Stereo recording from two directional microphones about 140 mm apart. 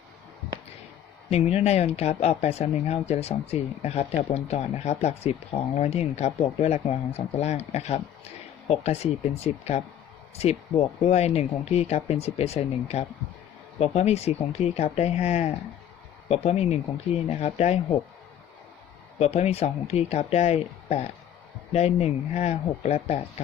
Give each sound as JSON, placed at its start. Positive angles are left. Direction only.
{"t": 1.3, "sound": "speech", "side_deg": 50}
{"t": 11.0, "sound": "speech", "side_deg": 50}
{"t": 19.2, "sound": "speech", "side_deg": 50}